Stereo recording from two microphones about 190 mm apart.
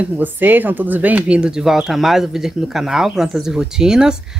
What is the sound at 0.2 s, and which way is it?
Speech, 10° right (ahead or behind).